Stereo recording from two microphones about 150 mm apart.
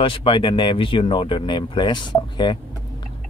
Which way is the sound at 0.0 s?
35° left (ahead or behind).